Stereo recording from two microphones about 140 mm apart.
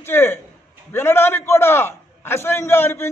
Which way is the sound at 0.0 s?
15° left (ahead or behind).